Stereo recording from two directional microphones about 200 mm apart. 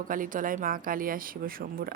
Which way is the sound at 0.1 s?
45° right (ahead or behind).